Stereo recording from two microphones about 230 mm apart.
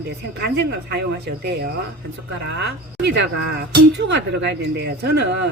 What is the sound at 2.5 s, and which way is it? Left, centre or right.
Speech, right.